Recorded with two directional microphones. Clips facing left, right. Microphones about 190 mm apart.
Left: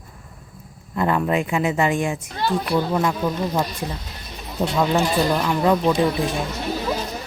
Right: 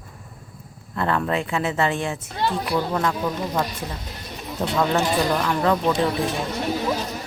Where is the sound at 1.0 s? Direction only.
10° left (ahead or behind).